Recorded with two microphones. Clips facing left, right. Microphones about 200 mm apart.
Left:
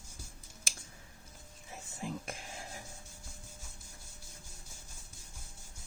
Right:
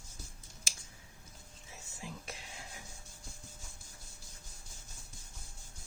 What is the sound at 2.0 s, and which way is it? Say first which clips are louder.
Whispering: left 7 dB; 55° left (ahead or behind).